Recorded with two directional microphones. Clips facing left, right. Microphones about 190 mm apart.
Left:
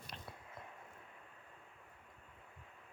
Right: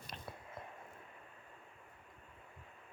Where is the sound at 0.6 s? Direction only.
25° right (ahead or behind).